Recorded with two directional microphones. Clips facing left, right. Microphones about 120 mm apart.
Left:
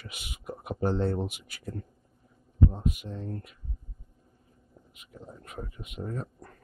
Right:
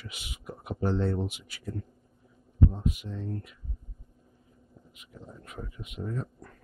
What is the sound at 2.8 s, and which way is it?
Speech, 50° left (ahead or behind).